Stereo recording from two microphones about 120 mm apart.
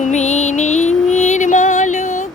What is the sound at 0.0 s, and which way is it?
Music, 75° left (ahead or behind).